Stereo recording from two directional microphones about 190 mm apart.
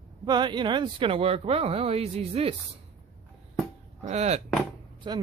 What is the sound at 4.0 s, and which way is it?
Speech, 35° right (ahead or behind).